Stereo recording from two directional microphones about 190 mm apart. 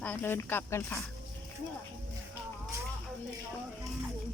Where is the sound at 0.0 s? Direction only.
10° left (ahead or behind).